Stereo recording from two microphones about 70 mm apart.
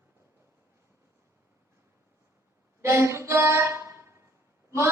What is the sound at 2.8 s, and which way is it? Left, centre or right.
Music, right.